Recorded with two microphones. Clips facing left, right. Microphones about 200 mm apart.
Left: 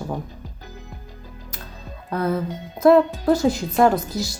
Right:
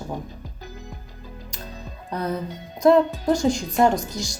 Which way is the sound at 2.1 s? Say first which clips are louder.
Left 4 dB; 15° right (ahead or behind).